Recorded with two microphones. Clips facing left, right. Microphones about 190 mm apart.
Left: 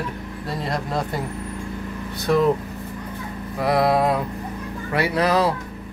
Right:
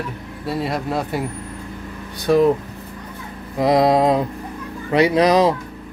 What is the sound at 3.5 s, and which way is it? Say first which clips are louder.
Speech: right 4 dB; 20° right (ahead or behind).